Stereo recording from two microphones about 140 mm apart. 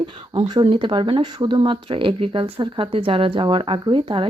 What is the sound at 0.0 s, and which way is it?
Speech, 30° right (ahead or behind).